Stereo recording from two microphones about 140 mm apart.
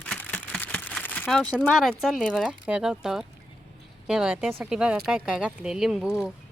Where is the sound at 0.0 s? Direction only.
10° left (ahead or behind).